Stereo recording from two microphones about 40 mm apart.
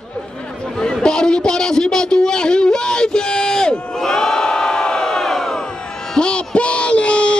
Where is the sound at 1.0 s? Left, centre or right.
Centre.